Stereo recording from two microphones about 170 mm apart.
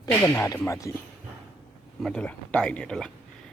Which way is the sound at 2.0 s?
5° left (ahead or behind).